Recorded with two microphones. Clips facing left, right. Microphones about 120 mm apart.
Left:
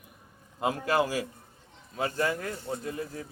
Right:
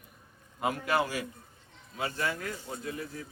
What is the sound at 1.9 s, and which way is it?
Speech, 40° left (ahead or behind).